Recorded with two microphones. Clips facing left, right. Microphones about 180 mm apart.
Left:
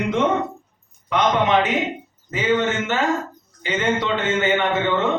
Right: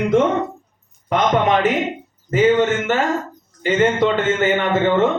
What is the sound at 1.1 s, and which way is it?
A man's voice, 45° right (ahead or behind).